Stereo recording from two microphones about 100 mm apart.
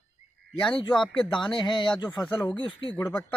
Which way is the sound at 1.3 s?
50° left (ahead or behind).